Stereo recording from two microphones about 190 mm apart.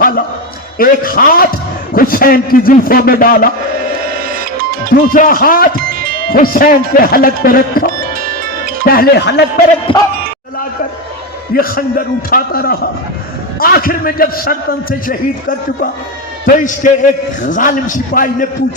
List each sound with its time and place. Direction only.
0.8 s a man's voice: 50° left (ahead or behind)
5.1 s a man's voice: 50° left (ahead or behind)
5.9 s music: 50° right (ahead or behind)
6.3 s a man's voice: 50° left (ahead or behind)
9.9 s speech: 25° left (ahead or behind)
11.5 s a man's voice: 50° left (ahead or behind)